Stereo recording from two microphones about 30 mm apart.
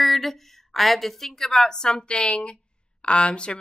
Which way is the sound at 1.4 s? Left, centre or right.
Centre.